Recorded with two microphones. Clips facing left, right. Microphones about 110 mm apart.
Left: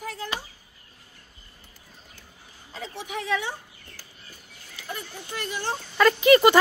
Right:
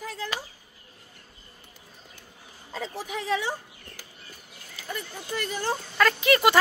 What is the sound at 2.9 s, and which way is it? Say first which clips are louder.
Speech: left 1 dB; 40° right (ahead or behind).